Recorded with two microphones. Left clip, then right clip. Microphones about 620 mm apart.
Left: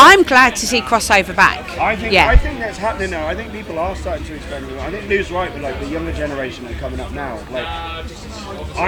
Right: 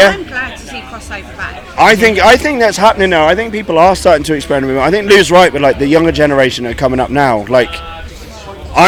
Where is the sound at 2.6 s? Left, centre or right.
Right.